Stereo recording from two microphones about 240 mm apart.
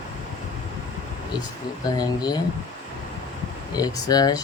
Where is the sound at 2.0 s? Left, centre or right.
Centre.